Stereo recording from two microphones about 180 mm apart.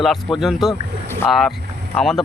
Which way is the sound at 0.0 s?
Centre (ahead or behind).